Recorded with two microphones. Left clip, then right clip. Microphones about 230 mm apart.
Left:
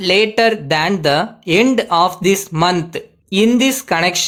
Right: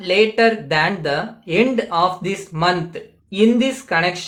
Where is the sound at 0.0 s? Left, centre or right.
Left.